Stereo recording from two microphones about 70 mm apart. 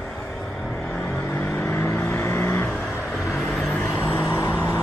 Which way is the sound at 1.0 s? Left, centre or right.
Centre.